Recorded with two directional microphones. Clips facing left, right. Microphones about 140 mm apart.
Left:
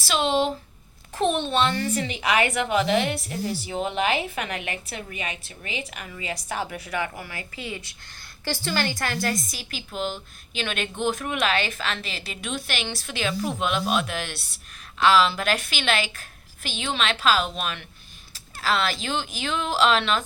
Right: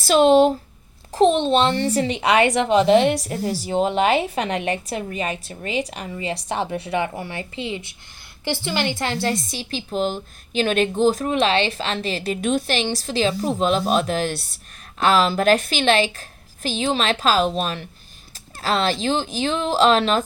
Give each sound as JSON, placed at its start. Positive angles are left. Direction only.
{"t": 0.0, "sound": "speech", "side_deg": -45}
{"t": 1.1, "sound": "a woman's voice", "side_deg": -30}